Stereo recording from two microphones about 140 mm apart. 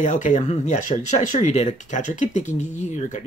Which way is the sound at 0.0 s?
60° left (ahead or behind).